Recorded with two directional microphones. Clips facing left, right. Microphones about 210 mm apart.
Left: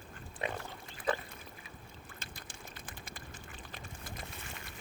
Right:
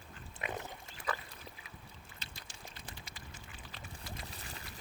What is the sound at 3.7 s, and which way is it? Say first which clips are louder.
Duck: even; 50° left (ahead or behind).